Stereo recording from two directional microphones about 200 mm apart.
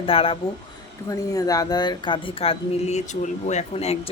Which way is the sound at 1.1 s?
15° left (ahead or behind).